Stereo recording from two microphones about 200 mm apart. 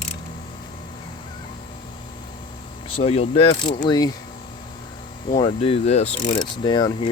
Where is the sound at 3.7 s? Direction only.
20° left (ahead or behind).